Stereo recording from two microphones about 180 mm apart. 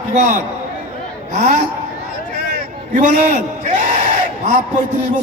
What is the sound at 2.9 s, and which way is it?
Speech, 45° right (ahead or behind).